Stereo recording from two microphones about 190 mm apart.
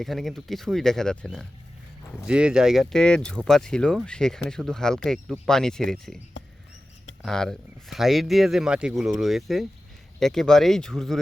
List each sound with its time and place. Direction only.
0.0 s speech: centre (ahead or behind)
7.2 s speech: centre (ahead or behind)